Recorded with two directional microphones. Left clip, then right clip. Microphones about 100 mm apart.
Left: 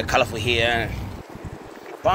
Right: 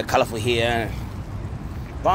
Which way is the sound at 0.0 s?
80° right.